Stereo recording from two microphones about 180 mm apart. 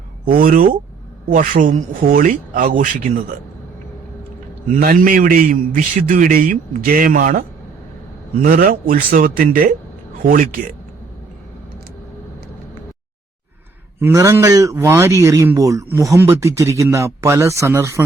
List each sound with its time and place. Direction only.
0.3 s a man's voice: 50° right (ahead or behind)
4.7 s a man's voice: 50° right (ahead or behind)
14.0 s a man's voice: 15° right (ahead or behind)